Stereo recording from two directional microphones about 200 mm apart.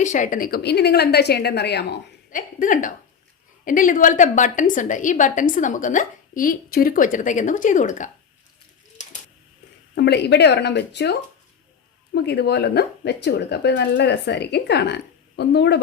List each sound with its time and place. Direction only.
0.0 s speech: 40° left (ahead or behind); by 1.9 s 55° left (ahead or behind)
2.3 s a woman's voice: 40° left (ahead or behind)
9.9 s speech: 55° left (ahead or behind)